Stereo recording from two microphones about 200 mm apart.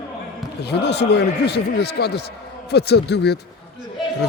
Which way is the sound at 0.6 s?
55° left (ahead or behind).